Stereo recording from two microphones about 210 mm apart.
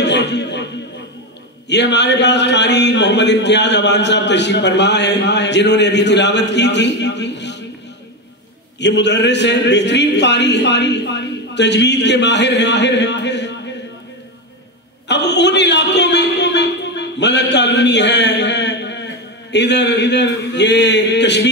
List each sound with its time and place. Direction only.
0.0 s music: 55° left (ahead or behind)
1.7 s a man's voice: 55° left (ahead or behind)
8.7 s a man's voice: 55° left (ahead or behind)
15.0 s a man's voice: 55° left (ahead or behind)